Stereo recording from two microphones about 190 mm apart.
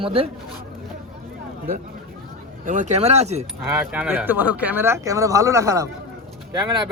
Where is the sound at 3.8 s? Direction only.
10° right (ahead or behind).